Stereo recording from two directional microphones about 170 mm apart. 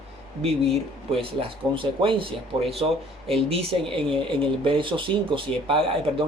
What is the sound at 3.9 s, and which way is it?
Speech, 30° right (ahead or behind).